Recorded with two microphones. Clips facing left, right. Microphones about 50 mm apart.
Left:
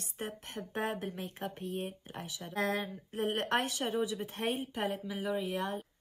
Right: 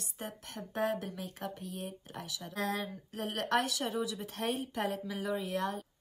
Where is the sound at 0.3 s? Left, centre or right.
Left; by 5.7 s centre.